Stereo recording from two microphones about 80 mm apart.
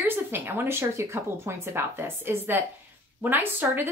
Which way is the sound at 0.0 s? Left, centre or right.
Right.